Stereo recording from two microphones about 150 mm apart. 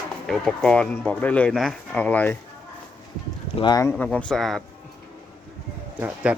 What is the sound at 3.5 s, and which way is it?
Speech, 30° left (ahead or behind).